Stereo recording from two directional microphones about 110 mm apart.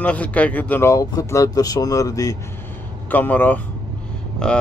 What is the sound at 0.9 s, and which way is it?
Speech, 30° left (ahead or behind).